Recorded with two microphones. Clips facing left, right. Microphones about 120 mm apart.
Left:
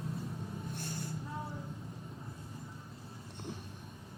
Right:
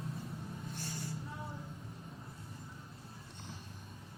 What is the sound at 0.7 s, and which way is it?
Vehicle, 55° left (ahead or behind).